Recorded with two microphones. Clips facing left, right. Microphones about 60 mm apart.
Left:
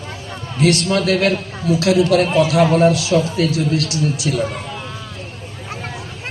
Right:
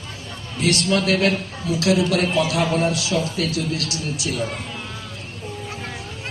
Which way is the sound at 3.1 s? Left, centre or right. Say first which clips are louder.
Left 6 dB; left.